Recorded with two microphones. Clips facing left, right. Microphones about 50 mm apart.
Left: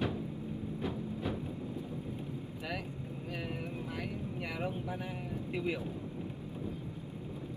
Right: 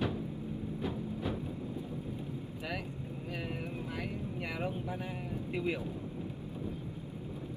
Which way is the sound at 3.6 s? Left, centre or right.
Centre.